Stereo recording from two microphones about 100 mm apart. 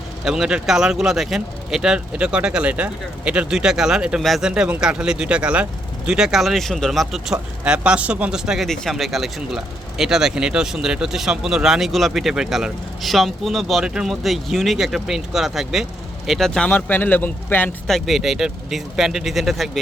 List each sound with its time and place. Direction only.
0.3 s speech: 5° right (ahead or behind)
16.6 s speech: 20° left (ahead or behind)
17.8 s speech: centre (ahead or behind)